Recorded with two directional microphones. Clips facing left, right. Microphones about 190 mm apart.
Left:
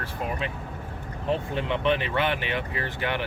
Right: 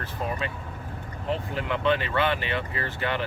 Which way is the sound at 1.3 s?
25° left (ahead or behind).